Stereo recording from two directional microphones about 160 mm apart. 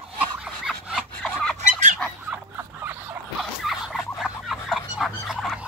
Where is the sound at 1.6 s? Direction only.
50° right (ahead or behind).